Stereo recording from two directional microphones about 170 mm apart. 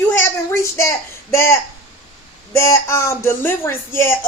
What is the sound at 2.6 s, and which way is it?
Speech, 15° left (ahead or behind).